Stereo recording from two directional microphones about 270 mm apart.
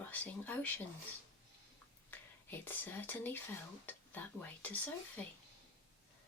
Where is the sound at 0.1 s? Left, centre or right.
Centre.